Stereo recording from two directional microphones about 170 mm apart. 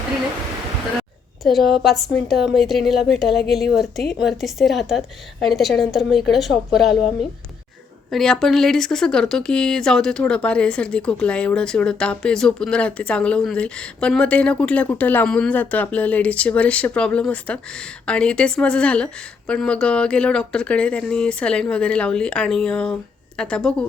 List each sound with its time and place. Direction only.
1.5 s a woman's voice: centre (ahead or behind)
8.1 s a woman's voice: centre (ahead or behind)